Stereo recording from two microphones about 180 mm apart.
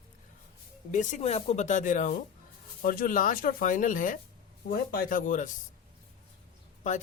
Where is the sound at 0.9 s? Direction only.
45° left (ahead or behind).